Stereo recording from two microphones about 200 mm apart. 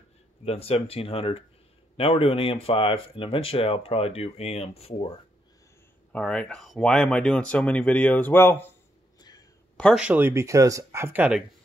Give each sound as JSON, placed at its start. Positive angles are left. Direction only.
{"t": 0.5, "sound": "speech", "side_deg": 30}
{"t": 6.1, "sound": "speech", "side_deg": 5}
{"t": 9.8, "sound": "speech", "side_deg": 0}